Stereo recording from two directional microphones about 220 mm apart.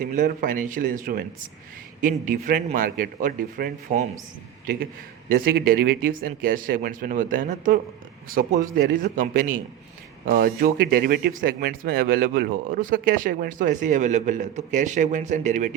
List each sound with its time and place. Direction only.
0.0 s speech: 35° right (ahead or behind)
5.3 s speech: 45° right (ahead or behind)